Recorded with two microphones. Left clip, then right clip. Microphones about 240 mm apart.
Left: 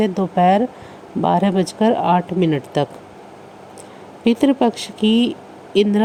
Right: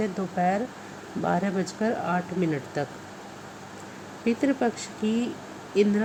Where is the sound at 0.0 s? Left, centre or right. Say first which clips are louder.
Left 10 dB; left.